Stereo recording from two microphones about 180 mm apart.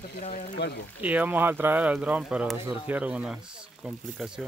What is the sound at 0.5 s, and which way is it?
Speech, 70° left (ahead or behind).